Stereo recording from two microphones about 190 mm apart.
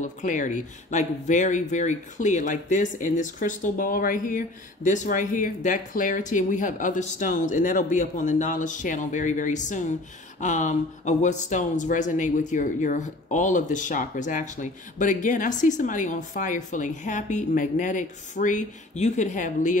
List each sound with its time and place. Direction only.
0.0 s speech: 40° left (ahead or behind)